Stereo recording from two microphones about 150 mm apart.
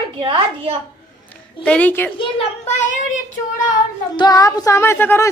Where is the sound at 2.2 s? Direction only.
45° left (ahead or behind).